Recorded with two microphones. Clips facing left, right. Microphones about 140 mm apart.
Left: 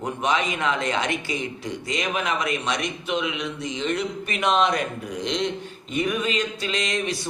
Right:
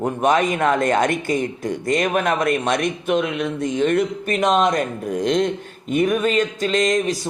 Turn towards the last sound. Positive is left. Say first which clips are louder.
# right 7 dB
turn(degrees=-45)  # may be behind; listen again after turning